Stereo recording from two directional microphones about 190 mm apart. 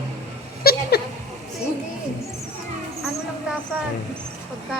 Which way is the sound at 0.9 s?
55° left (ahead or behind).